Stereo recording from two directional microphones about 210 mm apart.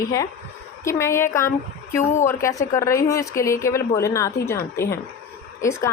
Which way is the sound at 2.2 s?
15° left (ahead or behind).